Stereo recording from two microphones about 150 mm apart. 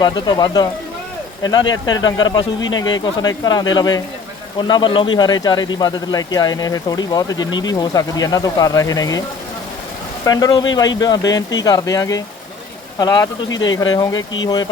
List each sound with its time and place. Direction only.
0.0 s speech: 30° left (ahead or behind)
10.2 s speech: 25° left (ahead or behind)